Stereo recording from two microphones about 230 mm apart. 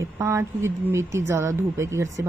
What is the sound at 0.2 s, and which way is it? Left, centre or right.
A woman's voice, centre.